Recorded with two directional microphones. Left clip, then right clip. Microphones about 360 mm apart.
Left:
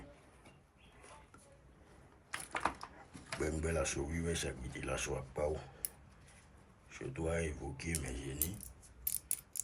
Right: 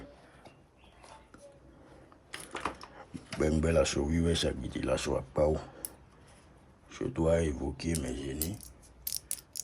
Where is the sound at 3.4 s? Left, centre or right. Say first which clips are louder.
Right 10 dB; centre.